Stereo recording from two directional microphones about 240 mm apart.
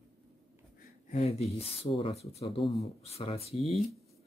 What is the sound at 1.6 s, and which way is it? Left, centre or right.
Speech, left.